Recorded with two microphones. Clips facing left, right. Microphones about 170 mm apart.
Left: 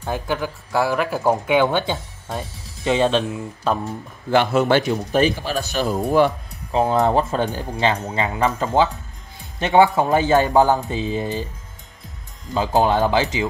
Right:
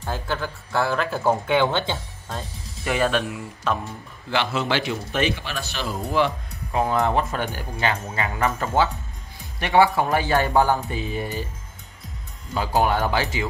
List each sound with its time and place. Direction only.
0.0 s speech: 15° left (ahead or behind); by 6.3 s 45° left (ahead or behind)
6.7 s speech: 30° left (ahead or behind)
12.5 s speech: 25° left (ahead or behind)